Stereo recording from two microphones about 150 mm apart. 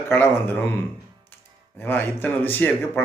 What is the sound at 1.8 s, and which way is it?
Speech, 15° left (ahead or behind).